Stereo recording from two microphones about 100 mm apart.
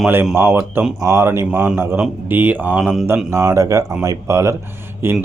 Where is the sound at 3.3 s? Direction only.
35° right (ahead or behind).